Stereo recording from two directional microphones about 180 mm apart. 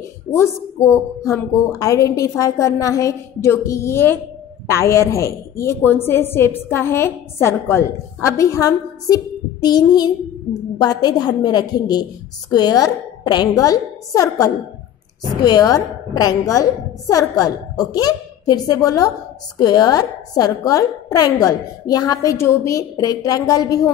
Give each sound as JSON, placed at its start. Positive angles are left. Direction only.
{"t": 0.3, "sound": "a woman's voice", "side_deg": 15}